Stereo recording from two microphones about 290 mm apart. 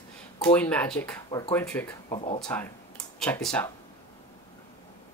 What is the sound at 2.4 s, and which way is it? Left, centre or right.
Speech, centre.